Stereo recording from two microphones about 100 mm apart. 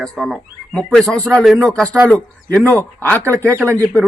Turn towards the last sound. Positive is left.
turn(degrees=15)  # may be behind; listen again after turning